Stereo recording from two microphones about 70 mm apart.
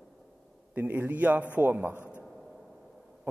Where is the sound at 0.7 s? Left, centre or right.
Right.